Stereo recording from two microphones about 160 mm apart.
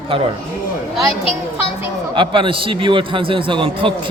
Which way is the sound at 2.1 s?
30° right (ahead or behind).